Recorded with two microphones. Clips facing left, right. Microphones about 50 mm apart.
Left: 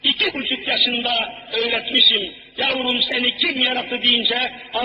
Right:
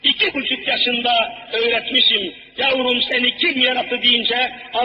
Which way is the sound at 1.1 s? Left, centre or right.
Right.